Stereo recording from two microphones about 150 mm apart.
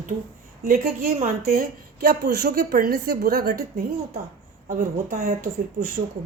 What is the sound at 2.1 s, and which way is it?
A woman's voice, 90° right.